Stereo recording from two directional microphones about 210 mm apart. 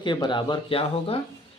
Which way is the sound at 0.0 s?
20° left (ahead or behind).